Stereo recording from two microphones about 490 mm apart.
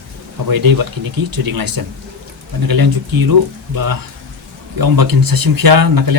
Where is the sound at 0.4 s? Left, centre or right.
Right.